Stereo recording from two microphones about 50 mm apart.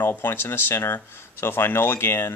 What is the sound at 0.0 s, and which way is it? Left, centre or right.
Speech, left.